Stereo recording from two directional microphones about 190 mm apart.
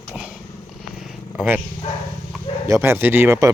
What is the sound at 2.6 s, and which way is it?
Speech, 15° right (ahead or behind).